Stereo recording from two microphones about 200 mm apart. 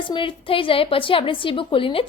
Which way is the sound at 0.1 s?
25° left (ahead or behind).